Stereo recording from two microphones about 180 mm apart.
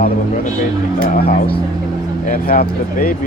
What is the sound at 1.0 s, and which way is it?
Speech, 55° left (ahead or behind).